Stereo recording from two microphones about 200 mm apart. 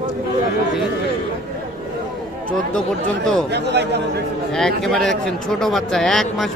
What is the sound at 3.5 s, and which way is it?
Speech, 55° right (ahead or behind).